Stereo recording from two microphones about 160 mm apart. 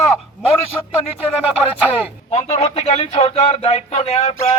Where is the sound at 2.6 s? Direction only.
40° left (ahead or behind).